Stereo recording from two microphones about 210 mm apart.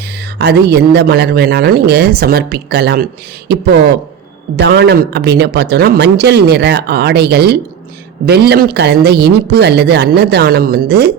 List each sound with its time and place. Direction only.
0.3 s a man's voice: 50° right (ahead or behind)
4.5 s a man's voice: 50° right (ahead or behind)